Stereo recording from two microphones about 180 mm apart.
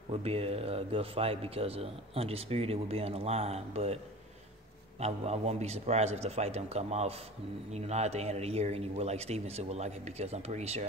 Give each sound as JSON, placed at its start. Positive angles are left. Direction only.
{"t": 0.1, "sound": "a man's voice", "side_deg": -35}
{"t": 5.0, "sound": "a man's voice", "side_deg": -35}